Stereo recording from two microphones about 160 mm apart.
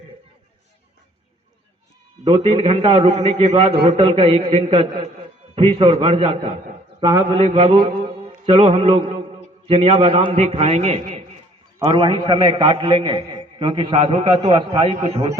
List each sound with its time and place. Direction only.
2.2 s a man's voice: 40° right (ahead or behind)
11.8 s a man's voice: 30° right (ahead or behind)